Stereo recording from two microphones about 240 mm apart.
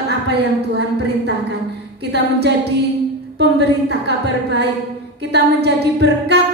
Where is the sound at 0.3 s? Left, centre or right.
Right.